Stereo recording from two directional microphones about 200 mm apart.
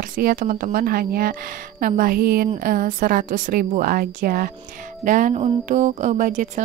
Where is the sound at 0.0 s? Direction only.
45° right (ahead or behind).